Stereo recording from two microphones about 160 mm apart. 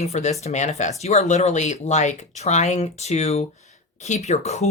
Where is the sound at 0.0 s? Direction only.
45° left (ahead or behind).